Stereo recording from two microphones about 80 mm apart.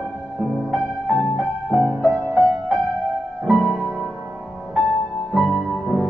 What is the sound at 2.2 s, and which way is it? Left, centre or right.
Music, right.